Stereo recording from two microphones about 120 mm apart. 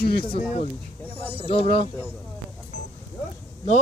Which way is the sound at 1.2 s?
50° left (ahead or behind).